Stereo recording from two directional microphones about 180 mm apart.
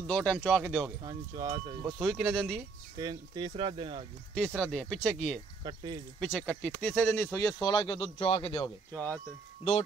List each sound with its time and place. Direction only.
0.0 s speech: 5° left (ahead or behind)
1.0 s speech: 20° right (ahead or behind)
1.9 s speech: centre (ahead or behind)
3.0 s speech: 20° right (ahead or behind)
4.6 s speech: 5° left (ahead or behind)
5.6 s speech: 25° right (ahead or behind)
6.1 s speech: 10° left (ahead or behind); by 8.6 s 30° left (ahead or behind)
8.6 s speech: 10° left (ahead or behind)